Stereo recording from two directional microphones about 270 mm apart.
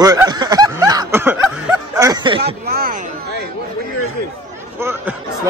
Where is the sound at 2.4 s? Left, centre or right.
Right.